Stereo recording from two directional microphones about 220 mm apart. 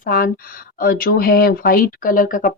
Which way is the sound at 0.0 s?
40° left (ahead or behind).